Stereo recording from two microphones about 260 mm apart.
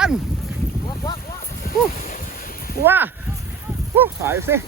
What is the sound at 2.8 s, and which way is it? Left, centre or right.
Speech, centre.